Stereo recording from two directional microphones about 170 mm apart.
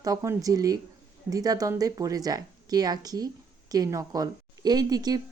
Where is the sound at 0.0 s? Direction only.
20° right (ahead or behind).